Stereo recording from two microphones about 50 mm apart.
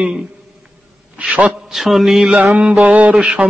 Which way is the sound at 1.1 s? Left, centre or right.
Right.